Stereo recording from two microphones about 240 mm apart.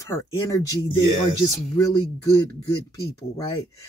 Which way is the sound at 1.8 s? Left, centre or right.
Centre.